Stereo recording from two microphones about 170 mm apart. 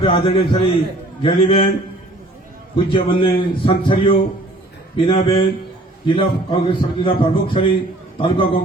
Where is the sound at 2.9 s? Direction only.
30° left (ahead or behind).